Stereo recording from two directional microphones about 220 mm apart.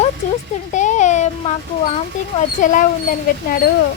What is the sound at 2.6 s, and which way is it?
Speech, 35° left (ahead or behind).